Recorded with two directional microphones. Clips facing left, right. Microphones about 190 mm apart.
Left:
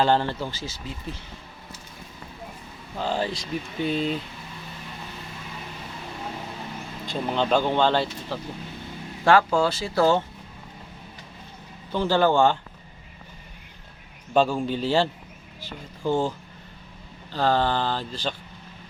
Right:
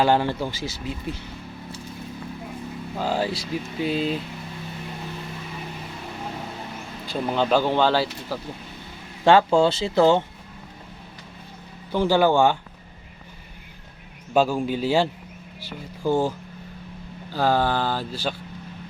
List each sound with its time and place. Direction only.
0.0 s speech: 10° right (ahead or behind)
3.0 s speech: 5° right (ahead or behind)
7.1 s speech: 5° right (ahead or behind)
9.2 s speech: 25° right (ahead or behind)
11.9 s speech: 10° right (ahead or behind)
14.3 s speech: 10° right (ahead or behind)
17.3 s speech: 10° right (ahead or behind)